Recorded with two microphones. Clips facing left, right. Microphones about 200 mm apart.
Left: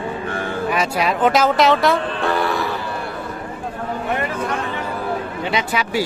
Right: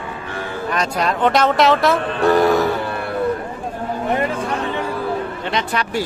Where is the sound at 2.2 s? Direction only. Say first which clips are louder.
Right 9 dB; 45° right (ahead or behind).